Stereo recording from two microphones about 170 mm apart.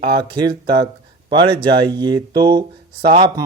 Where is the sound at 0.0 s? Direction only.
30° right (ahead or behind).